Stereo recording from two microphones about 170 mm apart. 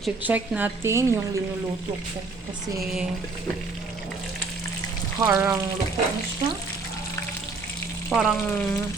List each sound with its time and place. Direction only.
0.2 s a woman's voice: 10° right (ahead or behind)
5.2 s speech: 20° right (ahead or behind)
8.1 s frying: 5° right (ahead or behind)
8.4 s speech: 10° left (ahead or behind)